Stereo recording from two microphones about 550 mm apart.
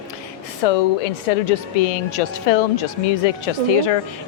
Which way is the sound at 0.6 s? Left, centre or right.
Left.